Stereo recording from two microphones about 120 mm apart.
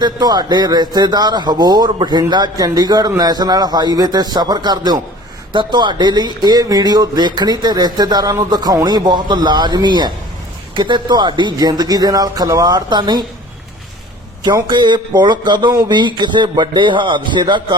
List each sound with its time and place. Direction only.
0.0 s speech: 35° right (ahead or behind)
14.4 s speech: 35° right (ahead or behind)